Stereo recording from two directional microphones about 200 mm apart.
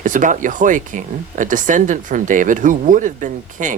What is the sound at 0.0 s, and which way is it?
Speech, 40° right (ahead or behind).